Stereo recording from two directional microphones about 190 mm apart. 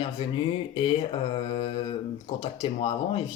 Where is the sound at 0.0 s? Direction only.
25° left (ahead or behind).